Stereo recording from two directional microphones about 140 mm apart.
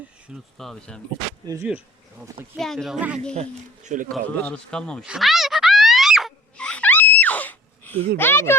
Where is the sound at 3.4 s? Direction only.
60° right (ahead or behind).